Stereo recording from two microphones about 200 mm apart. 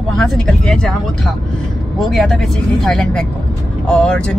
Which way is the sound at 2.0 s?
Centre (ahead or behind).